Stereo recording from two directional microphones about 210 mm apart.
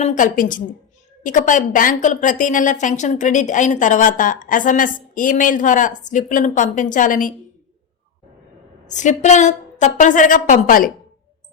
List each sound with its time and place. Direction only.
0.0 s a woman's voice: 35° left (ahead or behind)
8.9 s a woman's voice: 35° left (ahead or behind)